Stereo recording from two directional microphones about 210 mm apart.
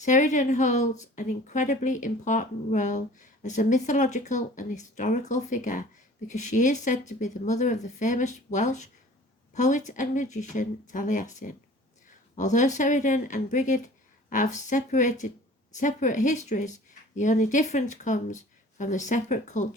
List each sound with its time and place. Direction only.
0.0 s speech: 35° left (ahead or behind)